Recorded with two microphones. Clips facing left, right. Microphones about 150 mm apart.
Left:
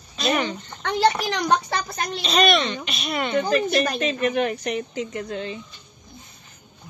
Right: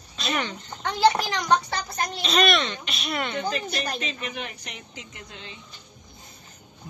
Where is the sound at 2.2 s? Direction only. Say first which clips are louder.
Left 3 dB; centre (ahead or behind).